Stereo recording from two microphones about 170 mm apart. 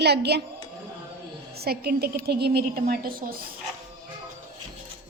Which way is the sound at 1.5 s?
65° right (ahead or behind).